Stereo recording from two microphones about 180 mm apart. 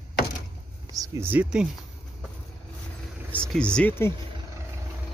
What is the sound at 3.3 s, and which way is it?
Speech, 5° left (ahead or behind).